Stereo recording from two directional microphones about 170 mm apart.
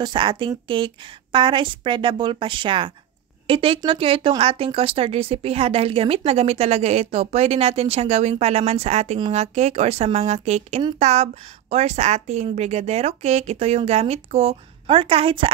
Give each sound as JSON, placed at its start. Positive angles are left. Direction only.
{"t": 0.0, "sound": "a woman's voice", "side_deg": -30}